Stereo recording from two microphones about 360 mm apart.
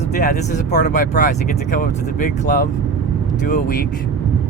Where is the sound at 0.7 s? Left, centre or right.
Left.